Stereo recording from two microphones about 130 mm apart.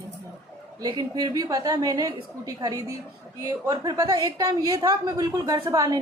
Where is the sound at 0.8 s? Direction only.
30° right (ahead or behind).